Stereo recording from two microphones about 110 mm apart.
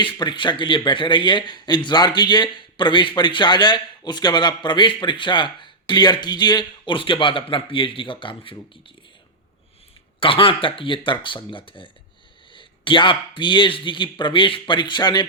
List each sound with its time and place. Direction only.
0.0 s speech: 45° left (ahead or behind)
10.2 s speech: 55° left (ahead or behind)